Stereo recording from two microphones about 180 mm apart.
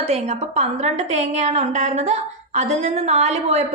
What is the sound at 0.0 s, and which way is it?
A woman's voice, 35° right (ahead or behind).